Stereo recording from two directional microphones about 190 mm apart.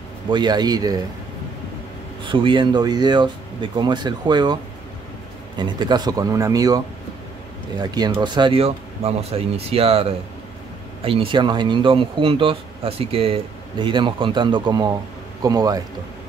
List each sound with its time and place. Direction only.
0.3 s speech: 20° right (ahead or behind)
2.2 s speech: 25° right (ahead or behind)
5.6 s speech: 25° right (ahead or behind)
7.8 s speech: 20° right (ahead or behind)